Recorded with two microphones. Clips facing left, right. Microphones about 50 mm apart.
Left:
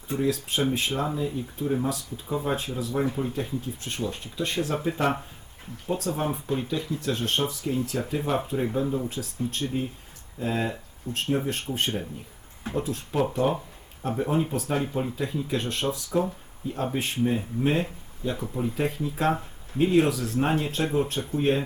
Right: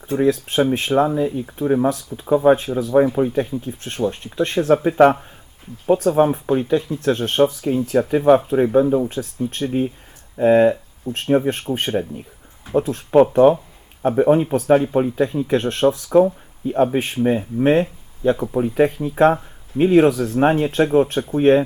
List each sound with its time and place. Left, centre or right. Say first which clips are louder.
0.2 s speech: right 9 dB; right